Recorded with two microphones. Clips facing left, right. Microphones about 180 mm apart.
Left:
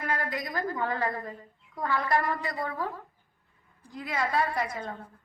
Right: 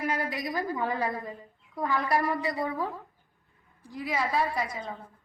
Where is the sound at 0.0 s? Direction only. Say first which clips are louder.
Right 2 dB; 10° right (ahead or behind).